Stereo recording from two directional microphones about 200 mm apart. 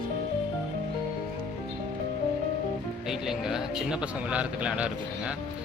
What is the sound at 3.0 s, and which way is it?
Speech, centre (ahead or behind).